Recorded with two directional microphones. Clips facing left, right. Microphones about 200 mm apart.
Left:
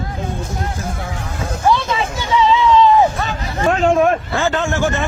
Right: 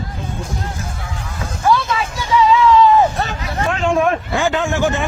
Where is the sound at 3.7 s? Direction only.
40° left (ahead or behind).